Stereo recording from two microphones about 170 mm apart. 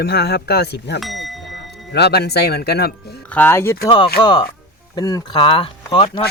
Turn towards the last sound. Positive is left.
turn(degrees=30)  # may be behind; listen again after turning